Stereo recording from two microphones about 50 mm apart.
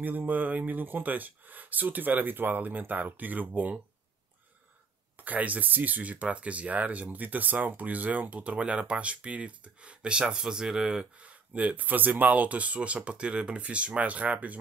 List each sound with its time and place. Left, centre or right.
0.0 s speech: right
5.1 s speech: right